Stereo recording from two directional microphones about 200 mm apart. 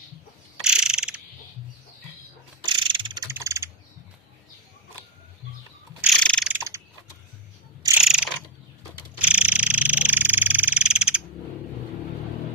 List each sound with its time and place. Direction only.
0.6 s mechanisms: 5° right (ahead or behind)
2.6 s mechanisms: 25° right (ahead or behind)
6.1 s mechanisms: 5° left (ahead or behind)
6.5 s mechanisms: 15° right (ahead or behind)
7.9 s mechanisms: 5° right (ahead or behind)
9.1 s frog: 5° right (ahead or behind)